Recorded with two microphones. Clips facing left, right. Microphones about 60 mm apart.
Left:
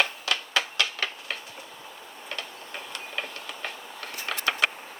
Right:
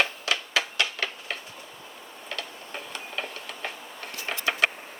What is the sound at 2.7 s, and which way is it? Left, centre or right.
Tick-tock, centre.